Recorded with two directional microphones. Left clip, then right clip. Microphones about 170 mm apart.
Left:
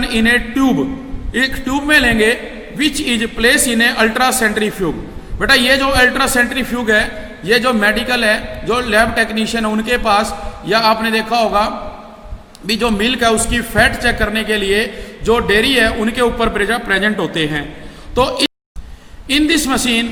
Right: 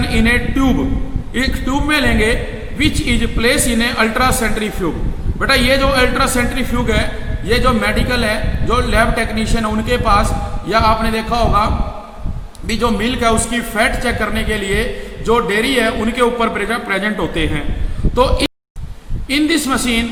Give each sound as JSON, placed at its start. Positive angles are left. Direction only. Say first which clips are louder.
{"t": 0.2, "sound": "a man's voice", "louder": "left 2 dB", "side_deg": 25}
{"t": 12.8, "sound": "a man's voice", "louder": "left 1 dB", "side_deg": 25}
{"t": 19.3, "sound": "a man's voice", "louder": "left 1 dB", "side_deg": 25}